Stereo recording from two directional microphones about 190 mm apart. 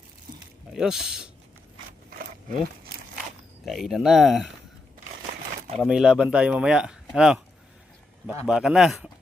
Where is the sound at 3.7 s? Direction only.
Centre (ahead or behind).